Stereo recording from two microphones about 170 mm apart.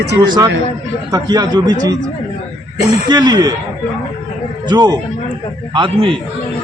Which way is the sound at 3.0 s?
25° right (ahead or behind).